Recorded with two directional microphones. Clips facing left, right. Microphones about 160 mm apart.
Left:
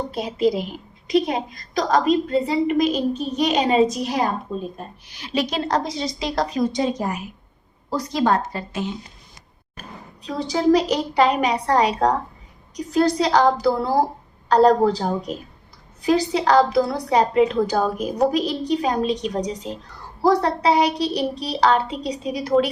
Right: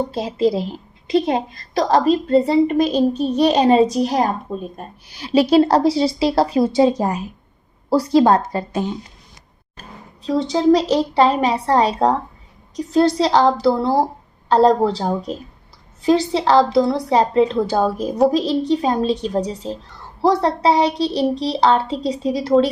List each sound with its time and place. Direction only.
0.1 s a woman's voice: 30° right (ahead or behind)
8.1 s a woman's voice: 35° right (ahead or behind)
10.2 s a child's voice: 25° right (ahead or behind)
16.0 s a child's voice: 25° right (ahead or behind)